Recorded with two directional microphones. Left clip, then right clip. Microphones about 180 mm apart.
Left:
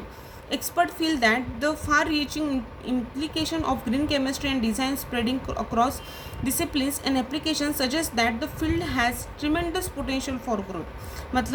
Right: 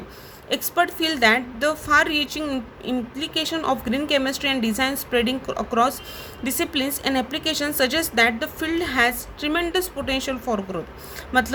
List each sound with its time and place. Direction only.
0.5 s a woman's voice: 45° right (ahead or behind)
11.3 s a woman's voice: 45° right (ahead or behind)